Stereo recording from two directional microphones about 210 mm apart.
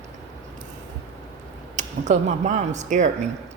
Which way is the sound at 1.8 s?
35° right (ahead or behind).